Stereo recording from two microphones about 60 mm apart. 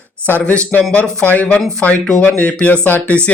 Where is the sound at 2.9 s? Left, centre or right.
Left.